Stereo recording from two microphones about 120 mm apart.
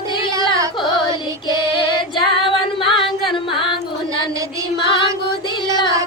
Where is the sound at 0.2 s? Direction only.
40° left (ahead or behind).